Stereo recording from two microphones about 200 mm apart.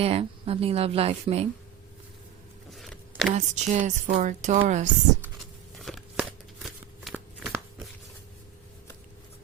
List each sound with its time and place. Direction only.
0.0 s speech: 30° right (ahead or behind)
2.6 s a sound: centre (ahead or behind)
3.3 s speech: 35° right (ahead or behind)
5.7 s shuffling cards: centre (ahead or behind)